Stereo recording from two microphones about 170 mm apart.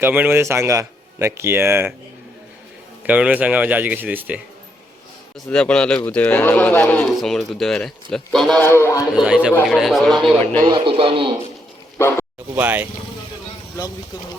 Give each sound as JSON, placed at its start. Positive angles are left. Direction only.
{"t": 0.0, "sound": "speech", "side_deg": -10}
{"t": 3.1, "sound": "speech", "side_deg": -10}
{"t": 5.5, "sound": "speech", "side_deg": 5}
{"t": 8.6, "sound": "speech", "side_deg": 15}
{"t": 9.1, "sound": "speech", "side_deg": -5}
{"t": 10.6, "sound": "speech", "side_deg": -25}
{"t": 12.5, "sound": "speech", "side_deg": -10}